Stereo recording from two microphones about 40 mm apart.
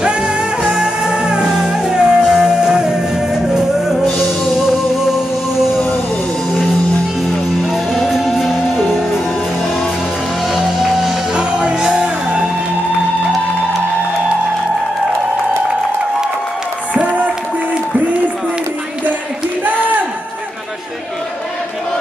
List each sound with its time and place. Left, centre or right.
0.0 s music: right
0.7 s music: centre
1.1 s music: right
1.5 s music: centre
4.6 s music: centre
7.7 s music: centre
10.5 s music: centre
11.3 s music: right
16.9 s a sound: right